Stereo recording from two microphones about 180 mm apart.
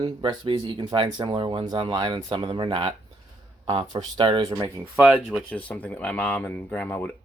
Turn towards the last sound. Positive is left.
turn(degrees=10)  # may be behind; listen again after turning